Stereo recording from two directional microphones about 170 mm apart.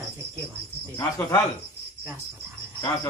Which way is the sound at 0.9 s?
15° left (ahead or behind).